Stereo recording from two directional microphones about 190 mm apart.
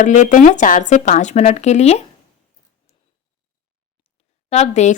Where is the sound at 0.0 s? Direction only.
40° left (ahead or behind).